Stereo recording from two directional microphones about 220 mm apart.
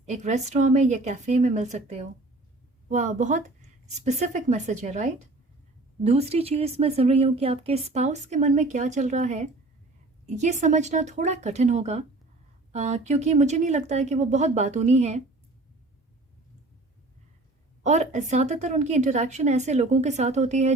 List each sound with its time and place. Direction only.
0.0 s a woman's voice: 30° right (ahead or behind)
17.8 s a woman's voice: 30° right (ahead or behind)